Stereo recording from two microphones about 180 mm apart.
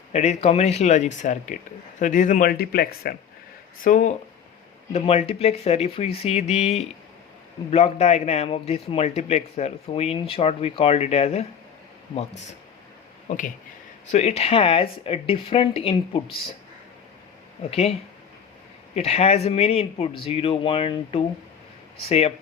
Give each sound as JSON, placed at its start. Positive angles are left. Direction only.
{"t": 0.1, "sound": "a man's voice", "side_deg": 40}
{"t": 3.8, "sound": "speech", "side_deg": 45}
{"t": 4.9, "sound": "a man's voice", "side_deg": 35}
{"t": 13.2, "sound": "a man's voice", "side_deg": 45}
{"t": 17.7, "sound": "a man's voice", "side_deg": 35}
{"t": 18.9, "sound": "a man's voice", "side_deg": 35}